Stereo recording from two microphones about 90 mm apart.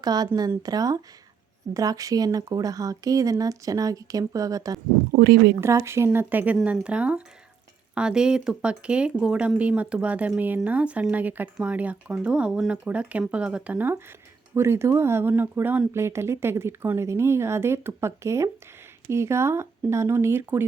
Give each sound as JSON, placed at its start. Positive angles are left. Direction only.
{"t": 0.0, "sound": "a woman's voice", "side_deg": -45}
{"t": 6.1, "sound": "speech", "side_deg": -20}
{"t": 14.5, "sound": "speech", "side_deg": -30}